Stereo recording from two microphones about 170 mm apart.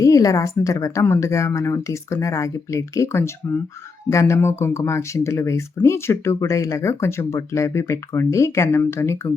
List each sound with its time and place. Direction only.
0.0 s speech: 20° left (ahead or behind)